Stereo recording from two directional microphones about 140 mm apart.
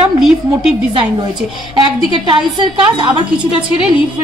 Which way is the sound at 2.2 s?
35° right (ahead or behind).